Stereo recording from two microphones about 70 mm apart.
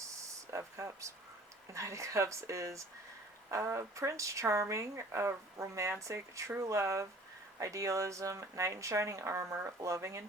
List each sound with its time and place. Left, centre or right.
0.3 s speech: right